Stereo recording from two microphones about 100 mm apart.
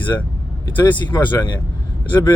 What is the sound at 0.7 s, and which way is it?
Speech, 20° left (ahead or behind).